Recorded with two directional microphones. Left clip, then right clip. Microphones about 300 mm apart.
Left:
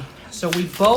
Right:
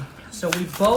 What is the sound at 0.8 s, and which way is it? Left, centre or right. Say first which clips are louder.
Speech: left 3 dB; left.